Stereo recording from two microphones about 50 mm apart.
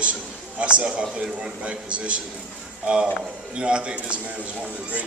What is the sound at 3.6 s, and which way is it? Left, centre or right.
Speech, centre.